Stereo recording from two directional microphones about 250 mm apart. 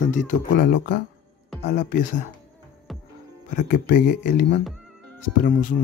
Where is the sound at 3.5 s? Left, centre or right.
Left.